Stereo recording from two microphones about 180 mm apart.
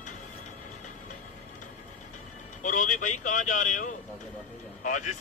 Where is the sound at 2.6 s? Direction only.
45° left (ahead or behind).